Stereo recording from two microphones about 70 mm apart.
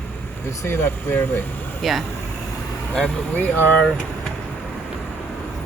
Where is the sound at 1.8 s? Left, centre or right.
Centre.